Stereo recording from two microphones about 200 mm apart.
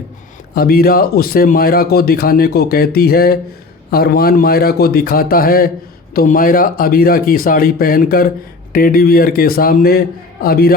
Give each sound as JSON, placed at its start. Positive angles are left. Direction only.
{"t": 0.5, "sound": "speech", "side_deg": 50}